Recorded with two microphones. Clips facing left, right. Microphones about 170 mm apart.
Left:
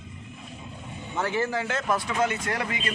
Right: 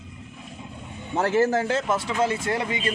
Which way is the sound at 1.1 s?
40° right (ahead or behind).